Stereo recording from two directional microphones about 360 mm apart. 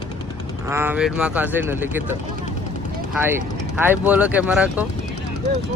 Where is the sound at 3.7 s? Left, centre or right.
Centre.